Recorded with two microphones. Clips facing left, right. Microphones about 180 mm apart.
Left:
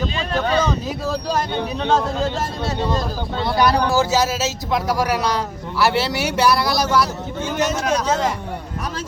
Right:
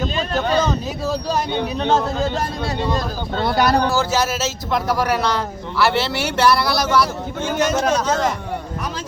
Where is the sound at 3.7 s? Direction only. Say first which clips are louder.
Left 1 dB; 10° left (ahead or behind).